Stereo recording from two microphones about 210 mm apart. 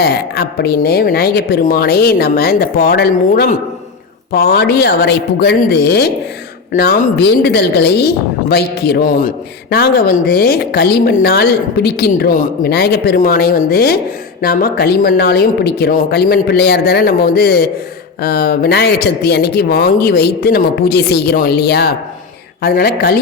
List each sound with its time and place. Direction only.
0.0 s speech: 50° left (ahead or behind)